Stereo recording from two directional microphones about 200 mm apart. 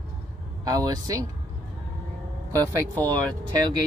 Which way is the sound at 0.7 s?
15° right (ahead or behind).